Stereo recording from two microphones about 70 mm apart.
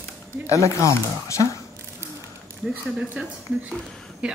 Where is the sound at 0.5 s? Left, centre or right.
Left.